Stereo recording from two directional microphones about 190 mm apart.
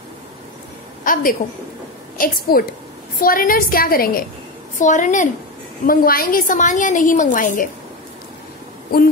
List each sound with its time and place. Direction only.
1.0 s a woman's voice: 45° left (ahead or behind)